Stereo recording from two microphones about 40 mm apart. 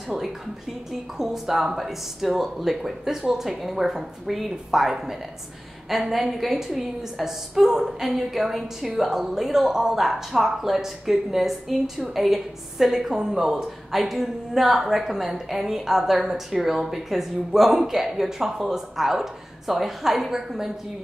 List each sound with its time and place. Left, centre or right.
1.1 s a woman's voice: centre
13.9 s a woman's voice: centre